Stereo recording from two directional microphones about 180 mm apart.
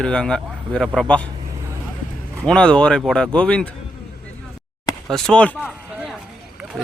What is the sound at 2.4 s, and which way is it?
Speech, 5° left (ahead or behind).